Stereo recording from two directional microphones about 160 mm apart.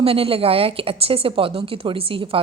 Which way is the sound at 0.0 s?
35° right (ahead or behind).